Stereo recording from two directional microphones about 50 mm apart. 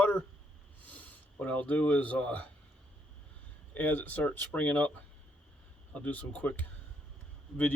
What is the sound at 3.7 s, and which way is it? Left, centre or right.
Speech, left.